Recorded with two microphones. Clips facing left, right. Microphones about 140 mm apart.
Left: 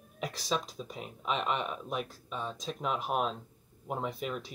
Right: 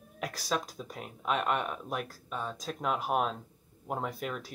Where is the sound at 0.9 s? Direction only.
55° right (ahead or behind).